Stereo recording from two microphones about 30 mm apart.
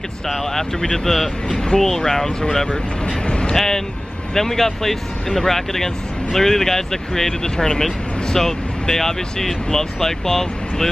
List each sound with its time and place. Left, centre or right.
0.3 s speech: centre
3.3 s vehicle: left
3.5 s speech: centre